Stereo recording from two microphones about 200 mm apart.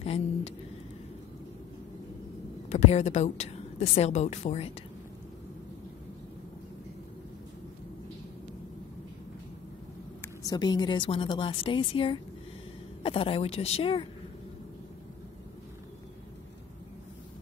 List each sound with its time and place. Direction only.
0.0 s a sound: 30° left (ahead or behind)
2.7 s speech: 35° left (ahead or behind)
10.2 s a woman's voice: 20° left (ahead or behind)